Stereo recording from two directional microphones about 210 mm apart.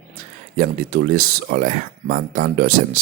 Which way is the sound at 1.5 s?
40° right (ahead or behind).